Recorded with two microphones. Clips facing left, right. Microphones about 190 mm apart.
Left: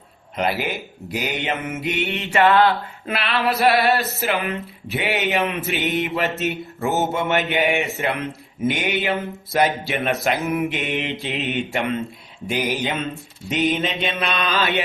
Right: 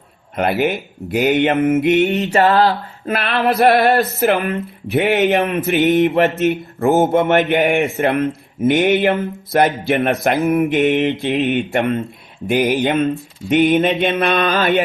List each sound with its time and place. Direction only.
0.3 s speech: 55° right (ahead or behind)